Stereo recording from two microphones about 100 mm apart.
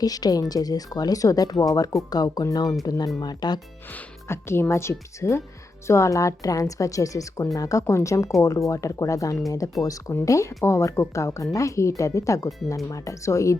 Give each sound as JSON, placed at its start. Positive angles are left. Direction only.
{"t": 0.0, "sound": "a woman's voice", "side_deg": 40}
{"t": 3.9, "sound": "a woman's voice", "side_deg": 25}